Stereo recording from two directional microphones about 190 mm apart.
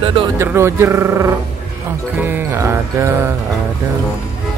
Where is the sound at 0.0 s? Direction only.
25° right (ahead or behind).